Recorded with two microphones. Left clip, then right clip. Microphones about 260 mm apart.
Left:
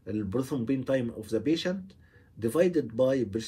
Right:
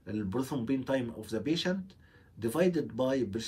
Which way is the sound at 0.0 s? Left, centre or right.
Centre.